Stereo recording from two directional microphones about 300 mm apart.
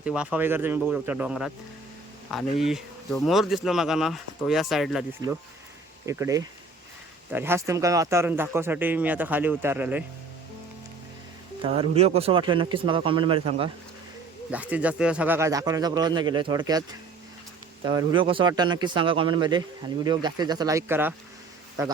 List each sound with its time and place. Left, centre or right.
0.0 s speech: centre
2.6 s speech: centre
6.1 s speech: centre
11.6 s speech: centre
14.5 s speech: centre
17.8 s speech: centre